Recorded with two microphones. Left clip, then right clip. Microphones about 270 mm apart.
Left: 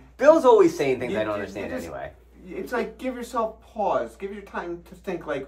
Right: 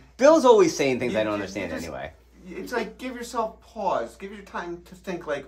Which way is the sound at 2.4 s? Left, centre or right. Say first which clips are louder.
Left 1 dB; centre.